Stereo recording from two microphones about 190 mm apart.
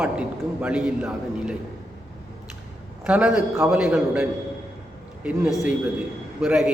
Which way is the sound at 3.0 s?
5° right (ahead or behind).